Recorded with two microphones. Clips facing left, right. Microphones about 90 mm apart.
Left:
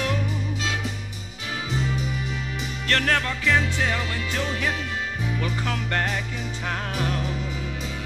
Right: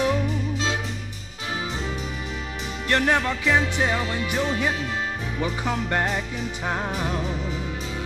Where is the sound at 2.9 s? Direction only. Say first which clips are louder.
Right 2 dB; 15° right (ahead or behind).